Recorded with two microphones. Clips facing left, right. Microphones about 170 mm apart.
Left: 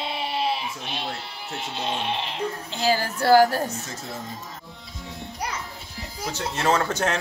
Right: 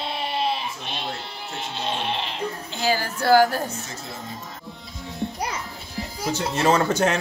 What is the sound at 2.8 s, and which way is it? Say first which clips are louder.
Music: left 1 dB; 35° left (ahead or behind).